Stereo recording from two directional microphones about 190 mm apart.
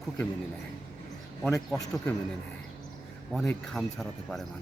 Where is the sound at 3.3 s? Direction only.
5° left (ahead or behind).